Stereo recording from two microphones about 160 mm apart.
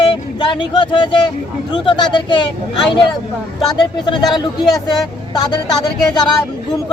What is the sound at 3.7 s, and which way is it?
Speech, 30° left (ahead or behind).